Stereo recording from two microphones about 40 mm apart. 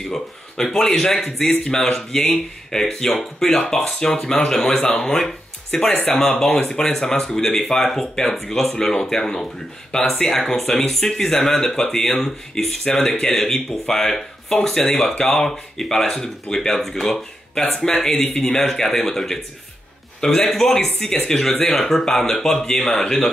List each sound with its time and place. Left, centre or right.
0.0 s speech: centre